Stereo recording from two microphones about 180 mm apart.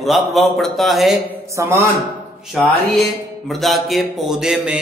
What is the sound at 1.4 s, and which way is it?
Speech, 15° right (ahead or behind).